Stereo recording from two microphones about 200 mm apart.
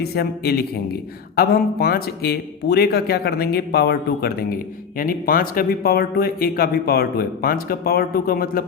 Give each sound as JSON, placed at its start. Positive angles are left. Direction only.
{"t": 0.0, "sound": "speech", "side_deg": 50}